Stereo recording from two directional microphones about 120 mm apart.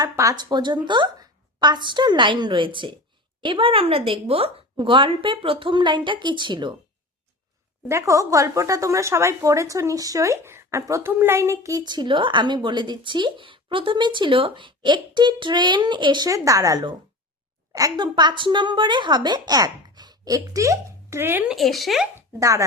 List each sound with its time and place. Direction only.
0.0 s a woman's voice: 30° right (ahead or behind)
7.9 s a woman's voice: 25° right (ahead or behind)
21.4 s speech: centre (ahead or behind)
22.1 s speech: 25° right (ahead or behind)